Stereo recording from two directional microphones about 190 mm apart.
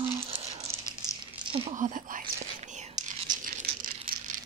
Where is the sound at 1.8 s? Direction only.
45° right (ahead or behind).